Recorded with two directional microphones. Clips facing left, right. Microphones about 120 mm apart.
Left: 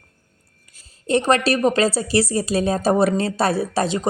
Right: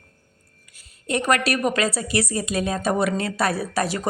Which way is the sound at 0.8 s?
30° left (ahead or behind).